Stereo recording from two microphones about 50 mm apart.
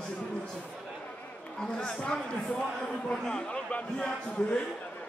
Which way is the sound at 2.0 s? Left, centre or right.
Left.